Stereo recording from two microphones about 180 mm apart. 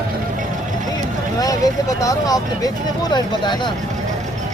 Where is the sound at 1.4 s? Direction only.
20° left (ahead or behind).